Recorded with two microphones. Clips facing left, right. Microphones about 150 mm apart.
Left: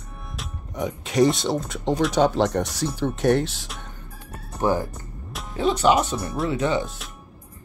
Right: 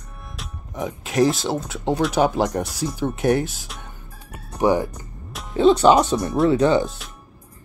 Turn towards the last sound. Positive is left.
turn(degrees=-35)  # may be behind; listen again after turning